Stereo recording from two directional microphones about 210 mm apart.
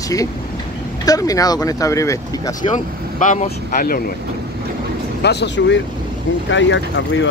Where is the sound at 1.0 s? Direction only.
15° left (ahead or behind).